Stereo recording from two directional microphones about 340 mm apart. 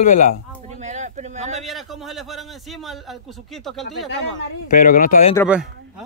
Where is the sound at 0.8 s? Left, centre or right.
Right.